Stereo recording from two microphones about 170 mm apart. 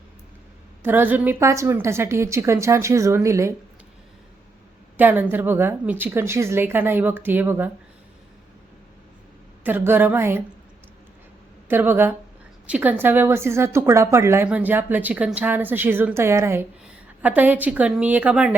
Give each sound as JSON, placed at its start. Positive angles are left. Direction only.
{"t": 0.8, "sound": "a woman's voice", "side_deg": -10}
{"t": 4.9, "sound": "a woman's voice", "side_deg": -10}
{"t": 9.6, "sound": "a woman's voice", "side_deg": -10}
{"t": 11.7, "sound": "a woman's voice", "side_deg": -10}